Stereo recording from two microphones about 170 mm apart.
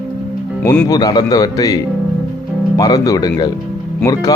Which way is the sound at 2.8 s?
20° left (ahead or behind).